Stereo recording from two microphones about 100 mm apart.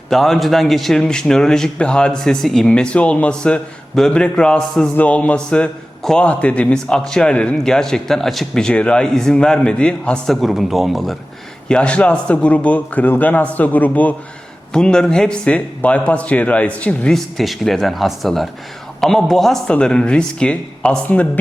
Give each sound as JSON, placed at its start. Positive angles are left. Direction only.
{"t": 0.1, "sound": "a man's voice", "side_deg": 0}
{"t": 11.7, "sound": "a man's voice", "side_deg": 10}